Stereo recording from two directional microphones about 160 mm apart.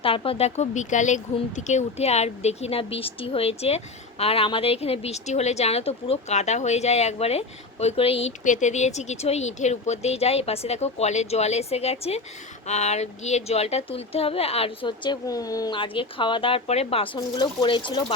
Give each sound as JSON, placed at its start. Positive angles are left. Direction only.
{"t": 0.0, "sound": "speech", "side_deg": 35}
{"t": 17.2, "sound": "speech", "side_deg": 30}